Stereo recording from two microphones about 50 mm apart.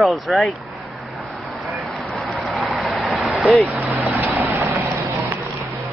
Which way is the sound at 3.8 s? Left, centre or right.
Right.